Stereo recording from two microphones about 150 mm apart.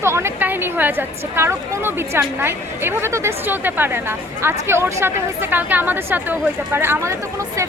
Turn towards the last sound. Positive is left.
turn(degrees=-15)  # may be behind; listen again after turning